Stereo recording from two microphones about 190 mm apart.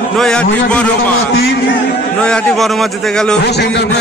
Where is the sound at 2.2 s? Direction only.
5° left (ahead or behind).